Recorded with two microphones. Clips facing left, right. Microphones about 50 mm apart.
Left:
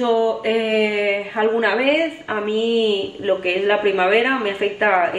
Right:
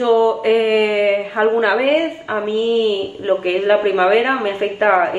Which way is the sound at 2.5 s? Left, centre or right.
Left.